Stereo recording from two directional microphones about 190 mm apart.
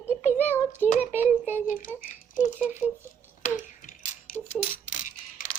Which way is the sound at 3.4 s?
45° left (ahead or behind).